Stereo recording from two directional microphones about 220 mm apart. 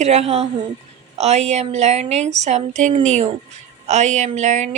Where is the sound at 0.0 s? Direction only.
30° right (ahead or behind).